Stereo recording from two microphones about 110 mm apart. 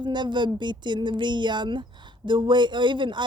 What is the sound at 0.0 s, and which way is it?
Speech, 45° right (ahead or behind).